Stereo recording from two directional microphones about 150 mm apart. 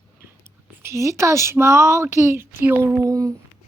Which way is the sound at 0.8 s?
20° right (ahead or behind).